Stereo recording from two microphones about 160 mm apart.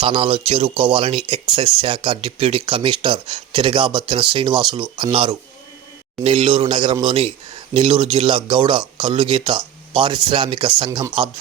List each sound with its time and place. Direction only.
0.0 s speech: 35° right (ahead or behind)